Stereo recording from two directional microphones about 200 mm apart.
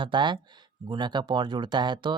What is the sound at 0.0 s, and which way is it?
Speech, 25° right (ahead or behind).